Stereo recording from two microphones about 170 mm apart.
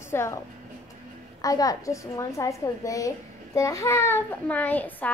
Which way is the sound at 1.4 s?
20° left (ahead or behind).